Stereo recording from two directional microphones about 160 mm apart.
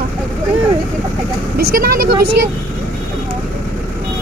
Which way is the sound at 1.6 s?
70° right (ahead or behind).